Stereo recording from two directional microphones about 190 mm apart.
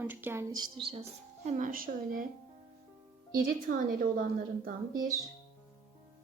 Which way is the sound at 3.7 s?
45° right (ahead or behind).